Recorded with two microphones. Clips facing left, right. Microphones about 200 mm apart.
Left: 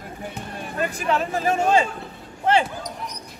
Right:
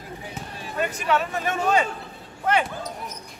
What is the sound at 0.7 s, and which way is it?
Speech, 30° left (ahead or behind).